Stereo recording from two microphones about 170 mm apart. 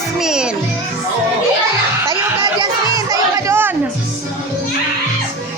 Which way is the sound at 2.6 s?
20° right (ahead or behind).